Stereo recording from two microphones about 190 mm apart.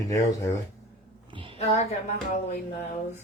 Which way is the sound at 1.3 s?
25° right (ahead or behind).